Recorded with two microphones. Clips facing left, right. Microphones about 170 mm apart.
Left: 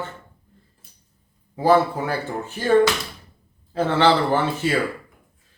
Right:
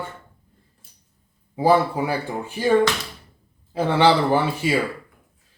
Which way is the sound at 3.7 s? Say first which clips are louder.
Right 1 dB; 10° right (ahead or behind).